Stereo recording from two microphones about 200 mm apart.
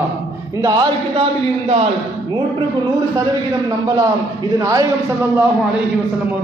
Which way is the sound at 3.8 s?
20° right (ahead or behind).